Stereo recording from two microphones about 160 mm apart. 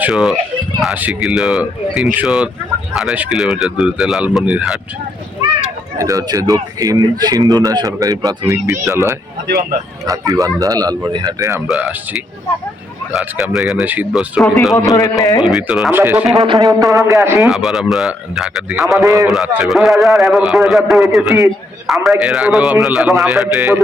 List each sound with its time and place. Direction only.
0.0 s a man's voice: 5° right (ahead or behind)
6.0 s a man's voice: 20° right (ahead or behind)
10.1 s a man's voice: 20° right (ahead or behind)
11.7 s a man's voice: 5° right (ahead or behind)
14.8 s a man's voice: 20° left (ahead or behind)
15.4 s a man's voice: centre (ahead or behind)
16.6 s a man's voice: 20° right (ahead or behind)
17.4 s a man's voice: centre (ahead or behind)